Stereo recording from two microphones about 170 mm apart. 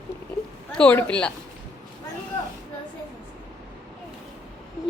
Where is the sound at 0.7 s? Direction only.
5° left (ahead or behind).